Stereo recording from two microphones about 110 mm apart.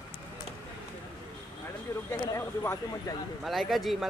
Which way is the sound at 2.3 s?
25° left (ahead or behind).